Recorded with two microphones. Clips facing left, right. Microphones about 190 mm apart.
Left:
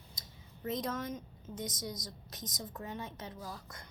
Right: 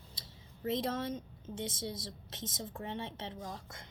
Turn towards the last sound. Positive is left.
turn(degrees=-25)  # may be behind; listen again after turning